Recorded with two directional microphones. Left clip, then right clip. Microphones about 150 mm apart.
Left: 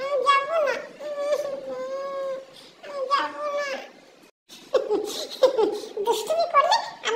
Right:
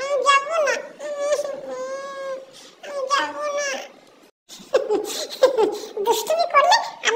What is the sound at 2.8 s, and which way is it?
Children playing, 25° right (ahead or behind).